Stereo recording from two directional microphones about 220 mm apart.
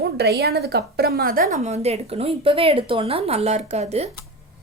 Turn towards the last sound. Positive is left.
turn(degrees=-30)  # may be behind; listen again after turning